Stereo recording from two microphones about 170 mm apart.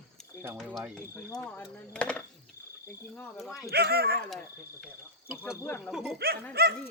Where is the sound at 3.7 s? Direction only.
65° right (ahead or behind).